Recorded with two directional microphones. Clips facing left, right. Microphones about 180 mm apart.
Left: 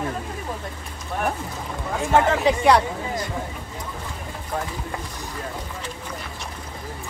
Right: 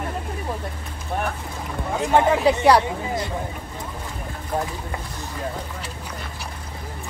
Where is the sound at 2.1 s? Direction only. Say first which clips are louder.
Right 1 dB; 10° right (ahead or behind).